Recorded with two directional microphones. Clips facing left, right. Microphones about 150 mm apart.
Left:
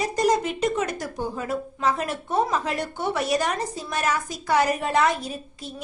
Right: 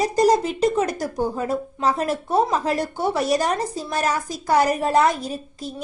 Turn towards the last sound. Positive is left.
turn(degrees=-40)  # may be behind; listen again after turning